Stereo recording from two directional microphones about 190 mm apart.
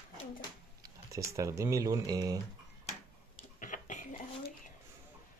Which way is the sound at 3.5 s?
40° left (ahead or behind).